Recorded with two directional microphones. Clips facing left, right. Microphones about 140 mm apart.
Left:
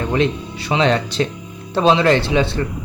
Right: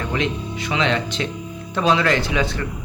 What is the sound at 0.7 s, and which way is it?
Speech, 35° left (ahead or behind).